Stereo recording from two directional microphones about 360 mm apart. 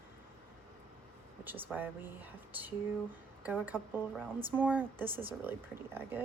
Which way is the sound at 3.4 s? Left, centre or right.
Centre.